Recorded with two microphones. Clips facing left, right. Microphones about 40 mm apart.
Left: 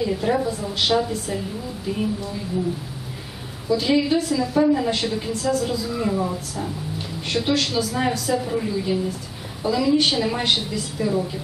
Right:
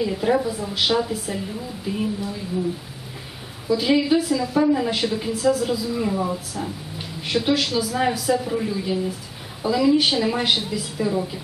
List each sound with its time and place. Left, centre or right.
0.0 s a woman's voice: centre
3.6 s a woman's voice: centre